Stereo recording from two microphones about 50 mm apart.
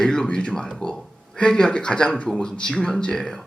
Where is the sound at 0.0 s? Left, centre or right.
Centre.